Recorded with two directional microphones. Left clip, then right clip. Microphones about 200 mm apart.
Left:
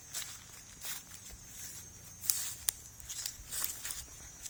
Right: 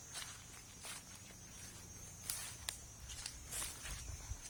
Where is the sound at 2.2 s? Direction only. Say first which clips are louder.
Left 9 dB; 55° left (ahead or behind).